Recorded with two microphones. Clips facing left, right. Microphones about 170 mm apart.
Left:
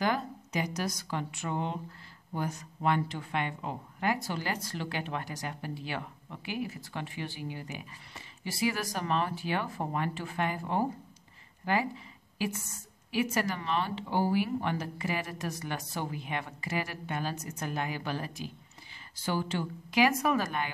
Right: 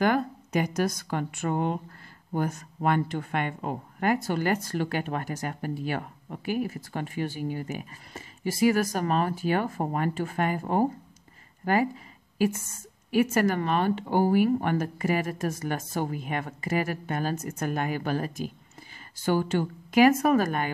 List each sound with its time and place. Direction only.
0.0 s a woman's voice: 55° right (ahead or behind)
13.1 s speech: 50° right (ahead or behind)